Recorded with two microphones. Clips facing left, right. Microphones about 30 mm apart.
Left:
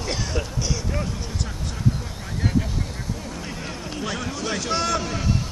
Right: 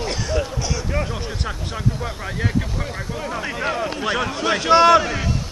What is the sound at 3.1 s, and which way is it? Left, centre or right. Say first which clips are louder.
Speech: right 7 dB; right.